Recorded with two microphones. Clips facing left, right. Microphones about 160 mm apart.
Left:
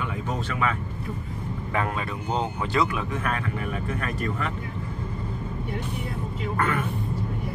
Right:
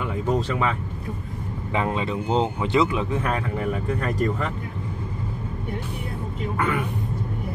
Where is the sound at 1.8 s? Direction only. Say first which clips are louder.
Right 4 dB; 20° right (ahead or behind).